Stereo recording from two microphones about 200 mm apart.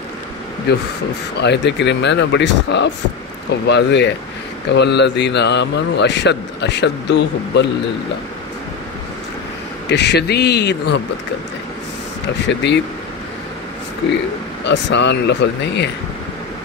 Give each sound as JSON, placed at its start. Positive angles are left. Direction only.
{"t": 0.7, "sound": "a man's voice", "side_deg": 55}
{"t": 9.8, "sound": "a man's voice", "side_deg": 55}
{"t": 12.4, "sound": "a man's voice", "side_deg": 60}
{"t": 14.6, "sound": "a man's voice", "side_deg": 65}